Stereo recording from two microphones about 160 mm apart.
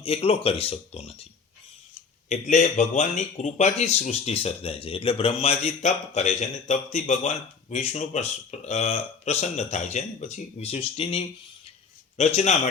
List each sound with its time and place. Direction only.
0.0 s speech: 40° left (ahead or behind)
2.3 s a man's voice: 50° left (ahead or behind)